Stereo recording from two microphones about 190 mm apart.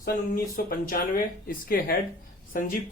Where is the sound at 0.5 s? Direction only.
50° left (ahead or behind).